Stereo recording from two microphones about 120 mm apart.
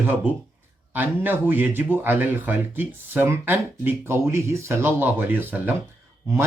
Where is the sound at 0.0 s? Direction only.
15° right (ahead or behind).